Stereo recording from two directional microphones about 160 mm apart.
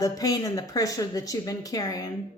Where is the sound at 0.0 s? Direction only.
25° left (ahead or behind).